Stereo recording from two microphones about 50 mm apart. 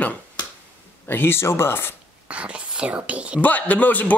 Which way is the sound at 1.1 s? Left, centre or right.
Left.